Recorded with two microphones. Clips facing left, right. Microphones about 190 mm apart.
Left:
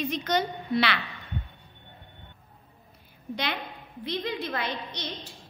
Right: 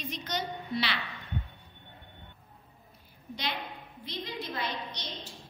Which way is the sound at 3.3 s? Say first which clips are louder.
Left 4 dB; 65° left (ahead or behind).